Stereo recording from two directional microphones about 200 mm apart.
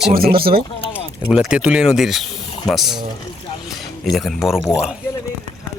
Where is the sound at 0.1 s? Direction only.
50° right (ahead or behind).